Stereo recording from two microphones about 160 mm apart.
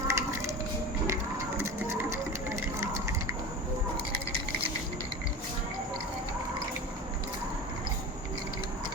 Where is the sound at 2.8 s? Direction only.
20° right (ahead or behind).